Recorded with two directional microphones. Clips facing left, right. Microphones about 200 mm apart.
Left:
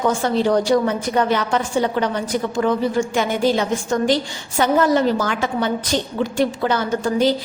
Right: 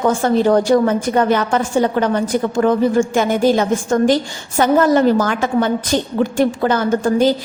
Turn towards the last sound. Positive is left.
turn(degrees=-50)  # may be behind; listen again after turning